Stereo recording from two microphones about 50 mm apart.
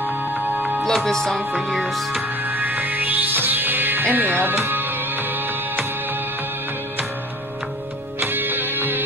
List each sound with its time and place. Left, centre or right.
0.8 s speech: centre
1.5 s music: centre
2.4 s music: right
8.2 s music: right